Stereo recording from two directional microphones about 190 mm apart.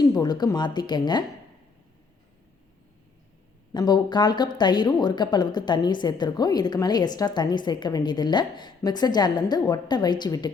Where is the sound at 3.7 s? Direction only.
20° left (ahead or behind).